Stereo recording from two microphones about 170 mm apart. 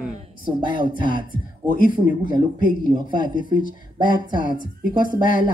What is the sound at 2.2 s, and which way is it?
Speech, 55° left (ahead or behind).